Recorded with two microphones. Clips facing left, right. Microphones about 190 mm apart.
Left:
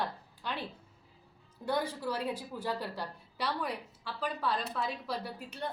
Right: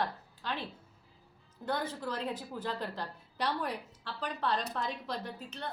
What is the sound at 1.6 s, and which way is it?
A woman's voice, 10° left (ahead or behind).